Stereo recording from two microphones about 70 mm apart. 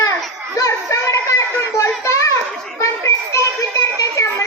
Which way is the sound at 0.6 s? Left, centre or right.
Left.